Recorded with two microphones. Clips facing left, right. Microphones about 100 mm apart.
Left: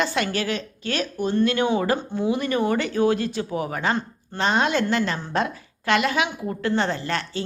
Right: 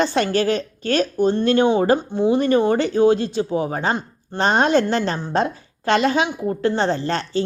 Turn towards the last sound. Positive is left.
turn(degrees=-30)  # may be behind; listen again after turning